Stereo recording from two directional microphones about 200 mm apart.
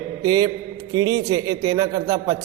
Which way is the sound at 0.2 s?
20° right (ahead or behind).